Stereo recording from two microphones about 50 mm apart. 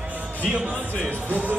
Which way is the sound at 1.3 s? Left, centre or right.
Right.